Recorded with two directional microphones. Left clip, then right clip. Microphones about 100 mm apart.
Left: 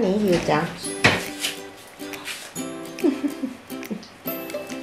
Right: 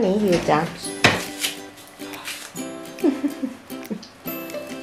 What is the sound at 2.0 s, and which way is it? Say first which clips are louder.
Music: even; centre (ahead or behind).